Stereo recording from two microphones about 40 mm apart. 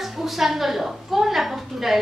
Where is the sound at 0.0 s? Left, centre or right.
Centre.